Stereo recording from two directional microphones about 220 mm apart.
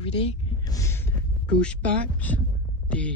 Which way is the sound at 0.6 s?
15° left (ahead or behind).